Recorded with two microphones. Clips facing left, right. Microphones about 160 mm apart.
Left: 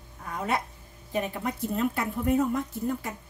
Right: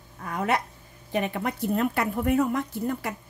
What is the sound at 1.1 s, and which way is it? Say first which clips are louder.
A woman's voice: right 2 dB; 70° right (ahead or behind).